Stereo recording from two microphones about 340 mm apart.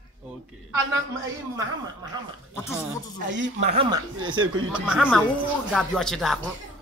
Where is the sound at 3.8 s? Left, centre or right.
Centre.